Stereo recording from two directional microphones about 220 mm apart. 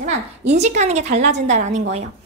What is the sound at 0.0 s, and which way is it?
A woman's voice, 30° right (ahead or behind).